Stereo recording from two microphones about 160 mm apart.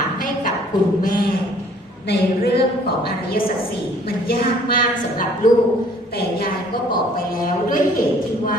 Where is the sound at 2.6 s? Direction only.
80° left.